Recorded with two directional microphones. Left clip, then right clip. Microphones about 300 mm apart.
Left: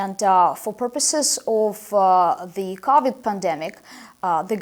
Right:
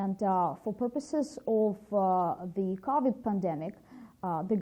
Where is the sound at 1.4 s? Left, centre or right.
Centre.